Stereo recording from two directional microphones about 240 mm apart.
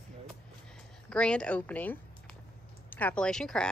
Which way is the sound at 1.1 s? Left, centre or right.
Centre.